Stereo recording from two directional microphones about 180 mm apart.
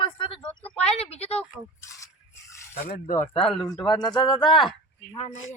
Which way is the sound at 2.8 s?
45° left (ahead or behind).